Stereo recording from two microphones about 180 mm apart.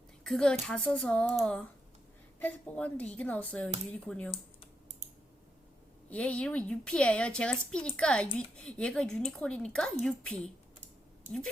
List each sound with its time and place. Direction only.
0.3 s a woman's voice: 5° left (ahead or behind)
6.1 s a woman's voice: 5° left (ahead or behind)